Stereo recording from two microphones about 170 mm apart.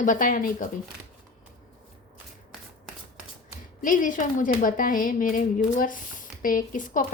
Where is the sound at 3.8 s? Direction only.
50° left (ahead or behind).